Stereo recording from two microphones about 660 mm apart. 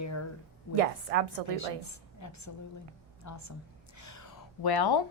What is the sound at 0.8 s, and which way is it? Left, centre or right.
Speech, right.